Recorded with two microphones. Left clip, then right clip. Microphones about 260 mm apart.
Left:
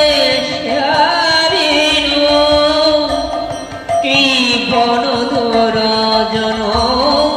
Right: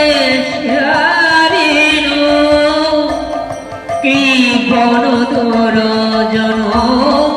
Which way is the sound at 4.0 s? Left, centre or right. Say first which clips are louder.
Right 1 dB; left.